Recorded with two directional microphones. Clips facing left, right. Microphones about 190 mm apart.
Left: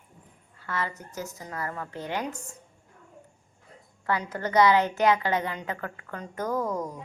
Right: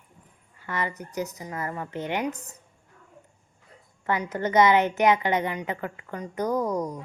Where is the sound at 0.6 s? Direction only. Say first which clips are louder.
Right 2 dB; 15° right (ahead or behind).